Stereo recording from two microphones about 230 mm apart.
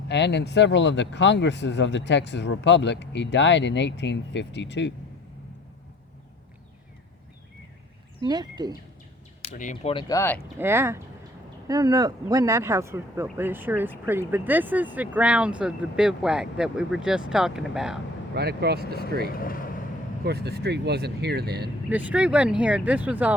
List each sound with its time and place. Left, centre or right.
0.1 s speech: left
8.2 s speech: centre
9.6 s speech: left; by 10.4 s centre
10.6 s speech: centre
18.3 s speech: right
19.3 s speech: left
20.2 s speech: right
21.8 s speech: centre